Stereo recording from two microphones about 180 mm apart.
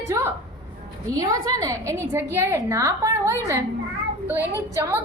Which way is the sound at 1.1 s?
20° right (ahead or behind).